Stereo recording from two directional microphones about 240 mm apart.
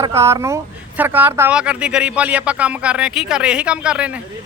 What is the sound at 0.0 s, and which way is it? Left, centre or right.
Speech, centre.